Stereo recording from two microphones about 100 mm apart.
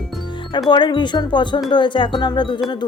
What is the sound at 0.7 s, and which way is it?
Speech, 50° left (ahead or behind).